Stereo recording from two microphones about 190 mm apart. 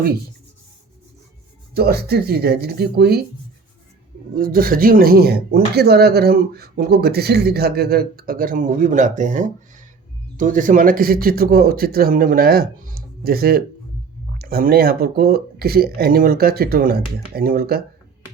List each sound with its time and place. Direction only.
1.7 s speech: 55° right (ahead or behind)
4.4 s speech: 50° right (ahead or behind)